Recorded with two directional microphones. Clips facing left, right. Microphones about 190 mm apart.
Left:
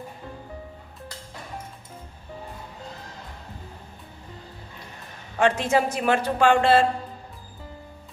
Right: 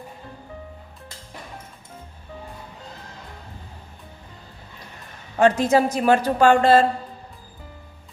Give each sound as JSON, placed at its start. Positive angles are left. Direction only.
{"t": 5.4, "sound": "a woman's voice", "side_deg": -40}